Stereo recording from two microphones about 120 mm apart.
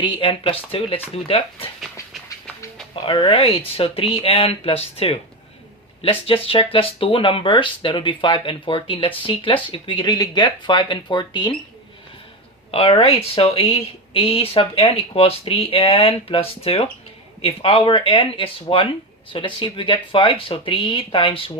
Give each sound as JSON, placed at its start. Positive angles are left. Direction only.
{"t": 0.0, "sound": "speech", "side_deg": 45}
{"t": 2.9, "sound": "speech", "side_deg": 45}
{"t": 12.7, "sound": "speech", "side_deg": 50}